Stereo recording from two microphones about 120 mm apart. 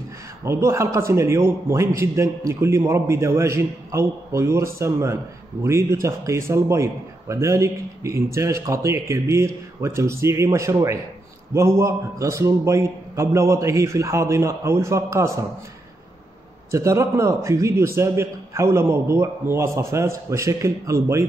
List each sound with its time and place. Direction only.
0.5 s a man's voice: 25° right (ahead or behind)
16.7 s a man's voice: 25° right (ahead or behind)